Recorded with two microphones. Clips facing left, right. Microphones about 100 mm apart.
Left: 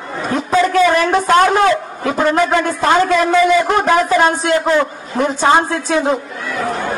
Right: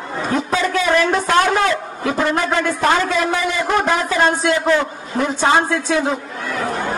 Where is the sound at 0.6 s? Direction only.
45° left (ahead or behind).